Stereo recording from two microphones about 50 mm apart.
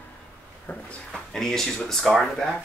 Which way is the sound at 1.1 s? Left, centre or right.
Centre.